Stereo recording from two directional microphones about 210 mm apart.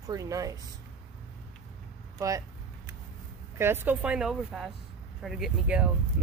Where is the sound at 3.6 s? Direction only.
10° right (ahead or behind).